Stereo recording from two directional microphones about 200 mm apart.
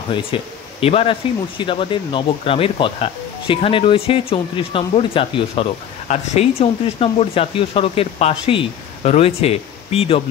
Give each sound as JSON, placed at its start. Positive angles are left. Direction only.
{"t": 0.1, "sound": "speech", "side_deg": 30}